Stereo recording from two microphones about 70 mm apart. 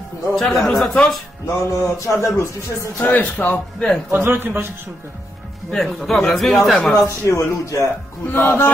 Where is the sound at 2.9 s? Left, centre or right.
Left.